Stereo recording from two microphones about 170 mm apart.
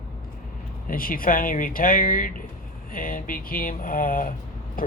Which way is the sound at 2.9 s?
55° left (ahead or behind).